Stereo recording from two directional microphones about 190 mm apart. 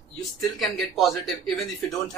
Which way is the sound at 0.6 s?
Centre (ahead or behind).